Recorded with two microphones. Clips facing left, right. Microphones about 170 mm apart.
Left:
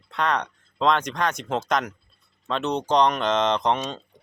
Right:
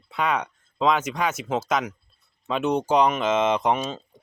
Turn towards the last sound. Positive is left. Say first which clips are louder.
# right 1 dB
turn(degrees=-5)  # may be behind; listen again after turning